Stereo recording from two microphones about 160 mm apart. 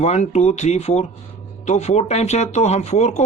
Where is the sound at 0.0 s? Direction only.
45° left (ahead or behind).